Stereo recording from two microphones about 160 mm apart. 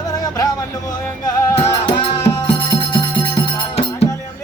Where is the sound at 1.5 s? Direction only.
40° left (ahead or behind).